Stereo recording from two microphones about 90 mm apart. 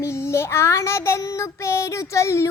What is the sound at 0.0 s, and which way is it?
A child's voice, 30° left (ahead or behind).